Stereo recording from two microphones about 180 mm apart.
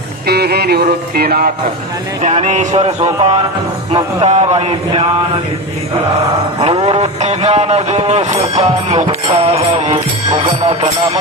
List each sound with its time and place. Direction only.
0.3 s music: 65° right (ahead or behind)
2.2 s a man's voice: 40° right (ahead or behind)
6.6 s a man's voice: 35° right (ahead or behind)
10.3 s music: 25° right (ahead or behind)